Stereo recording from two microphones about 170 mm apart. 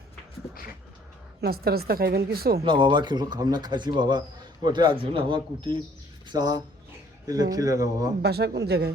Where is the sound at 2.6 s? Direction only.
30° right (ahead or behind).